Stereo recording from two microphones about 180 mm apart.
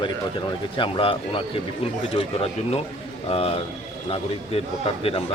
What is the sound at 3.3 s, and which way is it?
A man's voice, 30° left (ahead or behind).